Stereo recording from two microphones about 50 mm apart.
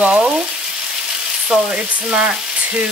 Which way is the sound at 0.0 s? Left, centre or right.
Right.